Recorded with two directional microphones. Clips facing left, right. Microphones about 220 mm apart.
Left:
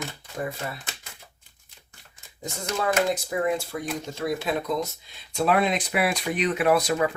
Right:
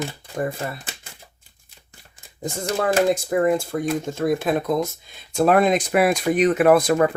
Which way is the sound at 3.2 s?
50° right (ahead or behind).